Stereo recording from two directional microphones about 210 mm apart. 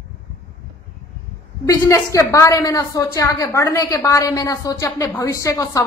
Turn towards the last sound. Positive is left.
turn(degrees=15)  # may be behind; listen again after turning